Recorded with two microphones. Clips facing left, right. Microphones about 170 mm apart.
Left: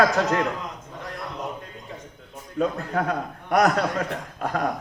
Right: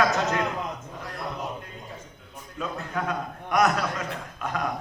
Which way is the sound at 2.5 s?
40° left (ahead or behind).